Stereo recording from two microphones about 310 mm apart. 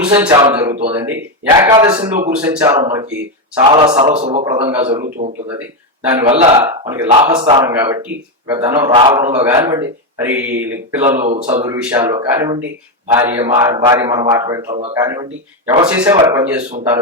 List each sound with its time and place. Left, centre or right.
0.0 s a man's voice: centre
6.7 s a man's voice: centre
9.4 s a man's voice: centre